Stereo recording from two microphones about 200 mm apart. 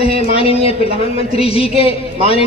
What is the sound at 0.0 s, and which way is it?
A man's voice, 30° left (ahead or behind).